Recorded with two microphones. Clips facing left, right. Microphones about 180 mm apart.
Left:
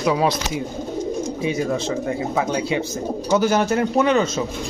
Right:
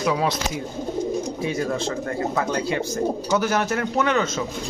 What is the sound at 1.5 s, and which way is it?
Speech, 15° left (ahead or behind).